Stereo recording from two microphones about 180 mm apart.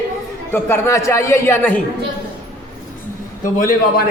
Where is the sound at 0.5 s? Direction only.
15° left (ahead or behind).